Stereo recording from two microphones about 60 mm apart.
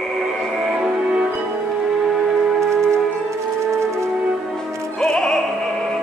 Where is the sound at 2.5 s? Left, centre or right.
Right.